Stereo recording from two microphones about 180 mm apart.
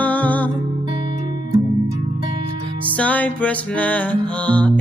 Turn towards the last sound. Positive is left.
turn(degrees=10)  # may be behind; listen again after turning